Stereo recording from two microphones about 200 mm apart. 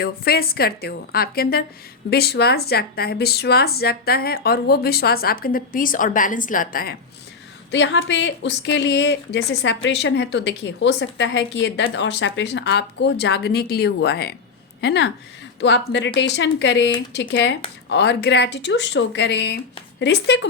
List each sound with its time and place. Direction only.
0.0 s speech: 50° left (ahead or behind)
7.7 s speech: 65° left (ahead or behind)